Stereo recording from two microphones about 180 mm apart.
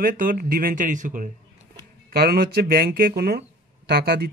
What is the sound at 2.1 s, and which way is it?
Speech, 60° right (ahead or behind).